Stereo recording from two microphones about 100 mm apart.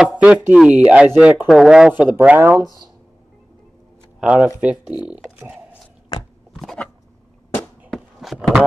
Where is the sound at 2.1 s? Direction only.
20° right (ahead or behind).